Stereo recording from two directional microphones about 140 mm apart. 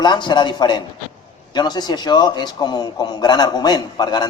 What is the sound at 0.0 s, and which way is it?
A man's voice, 30° left (ahead or behind).